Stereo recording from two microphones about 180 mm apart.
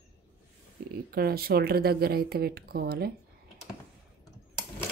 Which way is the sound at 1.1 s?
60° right (ahead or behind).